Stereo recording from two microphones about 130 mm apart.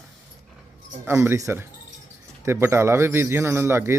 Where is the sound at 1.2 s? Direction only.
20° right (ahead or behind).